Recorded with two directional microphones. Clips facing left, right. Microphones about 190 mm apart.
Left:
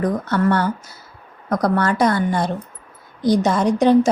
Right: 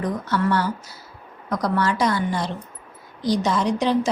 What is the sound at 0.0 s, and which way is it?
Speech, 50° left (ahead or behind).